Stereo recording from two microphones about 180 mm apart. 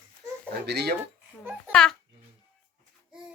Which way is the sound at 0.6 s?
65° right (ahead or behind).